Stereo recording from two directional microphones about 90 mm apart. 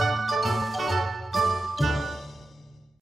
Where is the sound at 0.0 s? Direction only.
Centre (ahead or behind).